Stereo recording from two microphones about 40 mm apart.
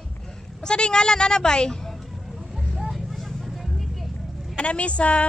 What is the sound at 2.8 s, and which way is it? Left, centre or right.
Vehicle, centre.